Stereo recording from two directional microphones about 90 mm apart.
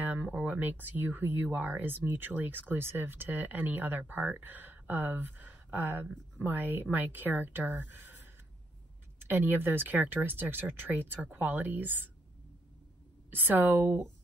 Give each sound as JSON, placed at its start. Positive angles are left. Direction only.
{"t": 0.0, "sound": "speech", "side_deg": -20}
{"t": 9.3, "sound": "speech", "side_deg": -20}
{"t": 13.3, "sound": "speech", "side_deg": -20}